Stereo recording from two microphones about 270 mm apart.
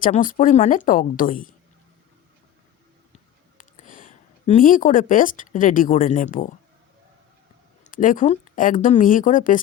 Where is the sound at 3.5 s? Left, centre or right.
Left.